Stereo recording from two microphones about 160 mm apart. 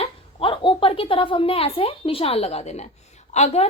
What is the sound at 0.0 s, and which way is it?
A woman's voice, 35° left (ahead or behind).